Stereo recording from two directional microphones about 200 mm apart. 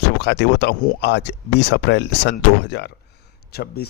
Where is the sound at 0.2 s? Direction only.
60° left (ahead or behind).